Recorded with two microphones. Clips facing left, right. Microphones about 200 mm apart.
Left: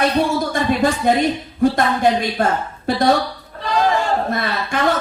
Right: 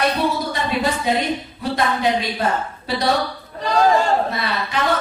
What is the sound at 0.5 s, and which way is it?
Speech, 50° left (ahead or behind).